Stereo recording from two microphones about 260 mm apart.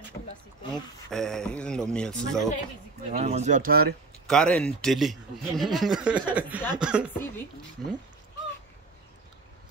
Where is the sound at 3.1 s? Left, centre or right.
Right.